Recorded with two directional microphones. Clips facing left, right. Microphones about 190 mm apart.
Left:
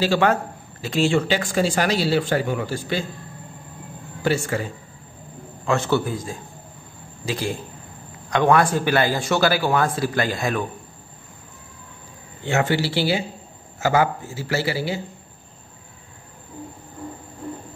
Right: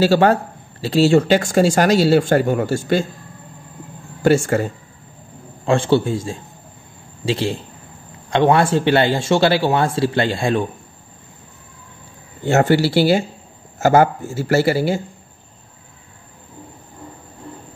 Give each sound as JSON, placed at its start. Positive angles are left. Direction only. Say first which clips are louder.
{"t": 0.0, "sound": "speech", "louder": "right 5 dB", "side_deg": -40}
{"t": 4.2, "sound": "speech", "louder": "right 7 dB", "side_deg": -45}
{"t": 5.7, "sound": "a man's voice", "louder": "right 5 dB", "side_deg": -25}
{"t": 12.4, "sound": "speech", "louder": "right 6 dB", "side_deg": -45}